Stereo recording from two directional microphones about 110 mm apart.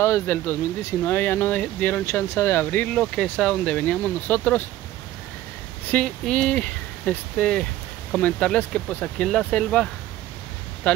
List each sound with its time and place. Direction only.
0.0 s speech: 20° left (ahead or behind)
5.9 s speech: 10° left (ahead or behind)